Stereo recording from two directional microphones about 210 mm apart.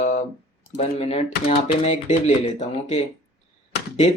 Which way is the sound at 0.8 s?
30° left (ahead or behind).